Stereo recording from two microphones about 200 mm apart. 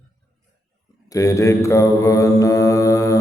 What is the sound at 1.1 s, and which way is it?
Mantra, 15° left (ahead or behind).